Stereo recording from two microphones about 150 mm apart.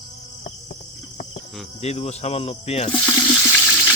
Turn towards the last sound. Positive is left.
turn(degrees=15)  # may be behind; listen again after turning